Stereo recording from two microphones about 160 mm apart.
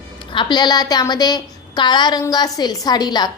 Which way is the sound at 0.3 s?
30° left (ahead or behind).